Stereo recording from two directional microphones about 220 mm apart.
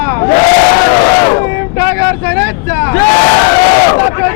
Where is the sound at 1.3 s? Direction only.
20° left (ahead or behind).